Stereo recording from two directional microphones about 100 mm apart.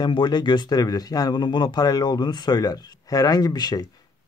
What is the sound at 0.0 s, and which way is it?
Speech, 45° left (ahead or behind).